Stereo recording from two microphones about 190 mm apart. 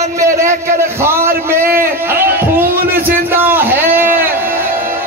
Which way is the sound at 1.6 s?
50° right (ahead or behind).